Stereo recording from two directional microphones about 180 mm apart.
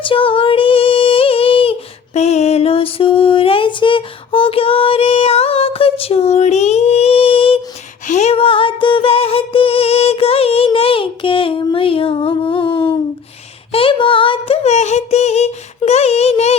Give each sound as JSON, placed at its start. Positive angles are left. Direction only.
{"t": 0.0, "sound": "female singing", "side_deg": 30}
{"t": 2.1, "sound": "music", "side_deg": 35}
{"t": 13.7, "sound": "a sound", "side_deg": 30}